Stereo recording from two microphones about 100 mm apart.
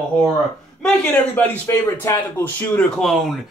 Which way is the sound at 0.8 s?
15° left (ahead or behind).